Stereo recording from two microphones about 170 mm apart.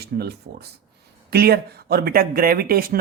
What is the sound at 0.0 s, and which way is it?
Speech, 70° right (ahead or behind).